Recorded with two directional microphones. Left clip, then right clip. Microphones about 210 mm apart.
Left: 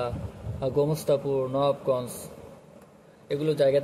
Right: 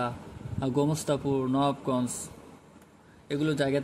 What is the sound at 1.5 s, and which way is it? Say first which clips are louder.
Speech: left 5 dB; 60° right (ahead or behind).